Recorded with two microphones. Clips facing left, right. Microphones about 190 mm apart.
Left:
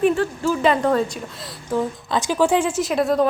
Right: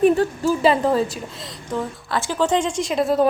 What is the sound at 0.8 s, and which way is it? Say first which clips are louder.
A woman's voice: even; 5° right (ahead or behind).